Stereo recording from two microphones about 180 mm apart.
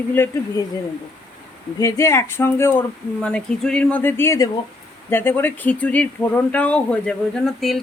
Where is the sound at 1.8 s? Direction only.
15° left (ahead or behind).